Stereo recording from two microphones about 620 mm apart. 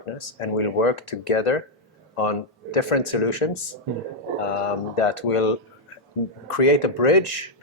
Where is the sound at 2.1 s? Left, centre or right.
Left.